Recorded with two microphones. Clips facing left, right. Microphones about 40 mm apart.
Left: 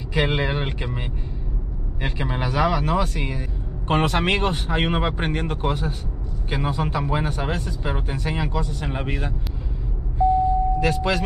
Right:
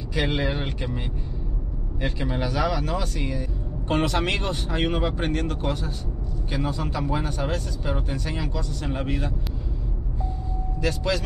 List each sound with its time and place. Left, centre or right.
0.1 s speech: left
10.8 s speech: left